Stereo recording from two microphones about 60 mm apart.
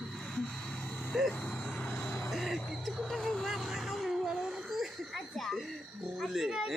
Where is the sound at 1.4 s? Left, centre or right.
Left.